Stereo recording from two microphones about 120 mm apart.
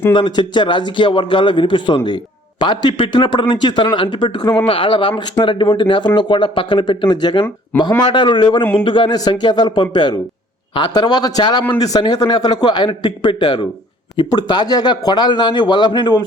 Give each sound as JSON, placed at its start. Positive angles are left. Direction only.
{"t": 0.1, "sound": "a man's voice", "side_deg": 40}